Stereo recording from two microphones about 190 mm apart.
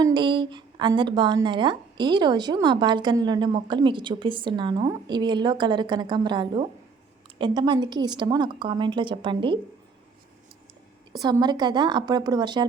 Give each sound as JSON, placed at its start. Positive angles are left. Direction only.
{"t": 0.0, "sound": "a woman's voice", "side_deg": -25}
{"t": 11.2, "sound": "a woman's voice", "side_deg": -20}